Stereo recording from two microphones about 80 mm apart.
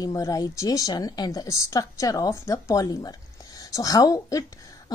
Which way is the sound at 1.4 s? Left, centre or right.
Left.